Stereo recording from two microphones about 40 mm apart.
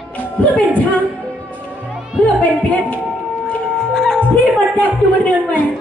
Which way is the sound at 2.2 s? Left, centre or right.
Left.